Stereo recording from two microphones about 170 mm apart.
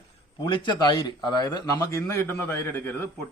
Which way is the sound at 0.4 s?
30° left (ahead or behind).